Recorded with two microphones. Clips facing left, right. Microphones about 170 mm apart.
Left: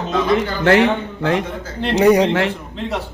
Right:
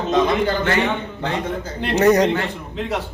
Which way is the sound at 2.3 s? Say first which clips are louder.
Left 4 dB; 90° left.